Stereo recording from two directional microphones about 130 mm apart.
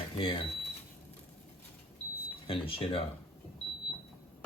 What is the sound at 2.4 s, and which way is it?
Speech, 45° left (ahead or behind).